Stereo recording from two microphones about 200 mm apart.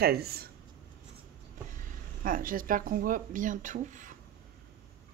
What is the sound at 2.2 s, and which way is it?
Speech, 45° right (ahead or behind).